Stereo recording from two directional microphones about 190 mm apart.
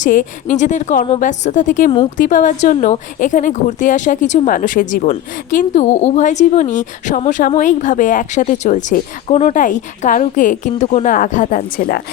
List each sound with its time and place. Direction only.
0.0 s a woman's voice: 45° left (ahead or behind)